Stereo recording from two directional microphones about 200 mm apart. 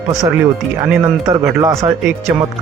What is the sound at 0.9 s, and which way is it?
Speech, 15° right (ahead or behind).